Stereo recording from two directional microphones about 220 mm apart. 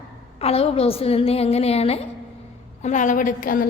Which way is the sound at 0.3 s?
25° left (ahead or behind).